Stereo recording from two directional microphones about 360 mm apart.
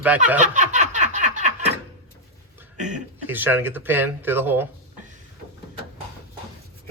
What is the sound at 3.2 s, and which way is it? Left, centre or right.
Speech, centre.